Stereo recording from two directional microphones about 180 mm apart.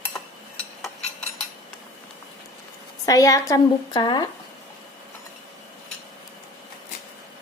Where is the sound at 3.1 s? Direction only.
20° left (ahead or behind).